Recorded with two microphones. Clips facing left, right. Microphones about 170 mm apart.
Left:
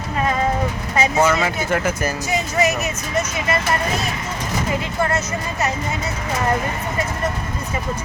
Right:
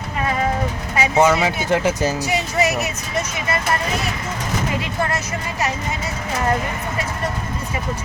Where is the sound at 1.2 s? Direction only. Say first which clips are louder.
Right 5 dB; 15° right (ahead or behind).